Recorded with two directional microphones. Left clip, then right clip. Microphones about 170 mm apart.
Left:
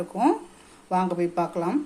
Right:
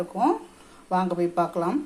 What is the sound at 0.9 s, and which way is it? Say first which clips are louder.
Speech: even; 10° left (ahead or behind).